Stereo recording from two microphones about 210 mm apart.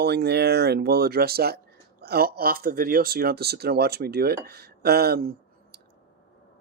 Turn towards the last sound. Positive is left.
turn(degrees=-45)  # may be behind; listen again after turning